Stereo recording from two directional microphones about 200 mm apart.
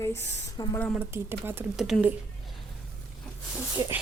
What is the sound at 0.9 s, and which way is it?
Speech, 10° right (ahead or behind).